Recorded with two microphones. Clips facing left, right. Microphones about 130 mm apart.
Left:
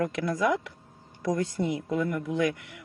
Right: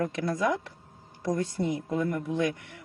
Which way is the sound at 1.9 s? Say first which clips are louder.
Even; 35° right (ahead or behind).